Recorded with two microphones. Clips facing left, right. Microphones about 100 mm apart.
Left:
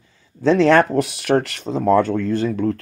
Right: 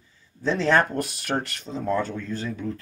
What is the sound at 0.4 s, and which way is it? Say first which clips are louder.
Speech: left 8 dB; 80° left.